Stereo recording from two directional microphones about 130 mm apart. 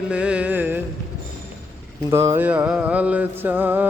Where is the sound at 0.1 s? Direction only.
10° right (ahead or behind).